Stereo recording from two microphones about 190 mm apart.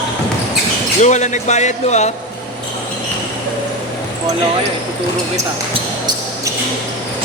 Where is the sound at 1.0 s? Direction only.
40° left (ahead or behind).